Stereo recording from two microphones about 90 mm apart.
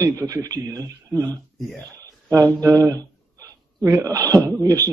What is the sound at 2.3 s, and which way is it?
A man's voice, 40° right (ahead or behind).